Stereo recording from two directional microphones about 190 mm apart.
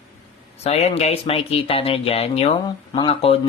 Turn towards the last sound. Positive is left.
turn(degrees=30)  # may be behind; listen again after turning